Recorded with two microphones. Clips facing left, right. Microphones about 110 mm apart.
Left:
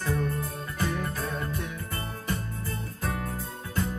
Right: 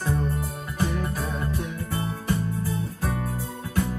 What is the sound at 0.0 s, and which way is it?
Music, 20° right (ahead or behind).